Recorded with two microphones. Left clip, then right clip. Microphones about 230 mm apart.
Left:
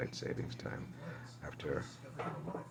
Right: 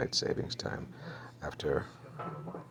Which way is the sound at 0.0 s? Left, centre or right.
Centre.